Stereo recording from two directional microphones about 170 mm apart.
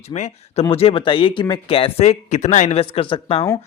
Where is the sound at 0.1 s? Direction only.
40° left (ahead or behind).